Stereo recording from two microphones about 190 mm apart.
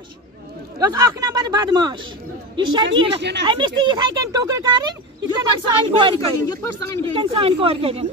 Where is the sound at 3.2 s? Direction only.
65° right (ahead or behind).